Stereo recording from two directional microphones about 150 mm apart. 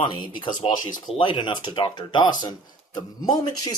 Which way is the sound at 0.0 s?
30° left (ahead or behind).